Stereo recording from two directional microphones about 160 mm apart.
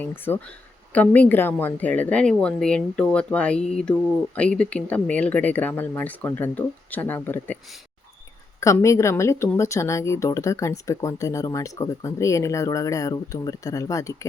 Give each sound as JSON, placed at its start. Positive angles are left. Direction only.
{"t": 0.0, "sound": "speech", "side_deg": 10}
{"t": 8.6, "sound": "speech", "side_deg": 20}